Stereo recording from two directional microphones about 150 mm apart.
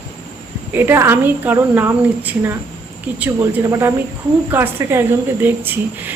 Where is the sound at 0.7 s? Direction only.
15° right (ahead or behind).